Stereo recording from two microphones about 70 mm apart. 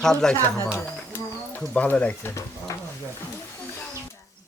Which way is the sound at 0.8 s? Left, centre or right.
Left.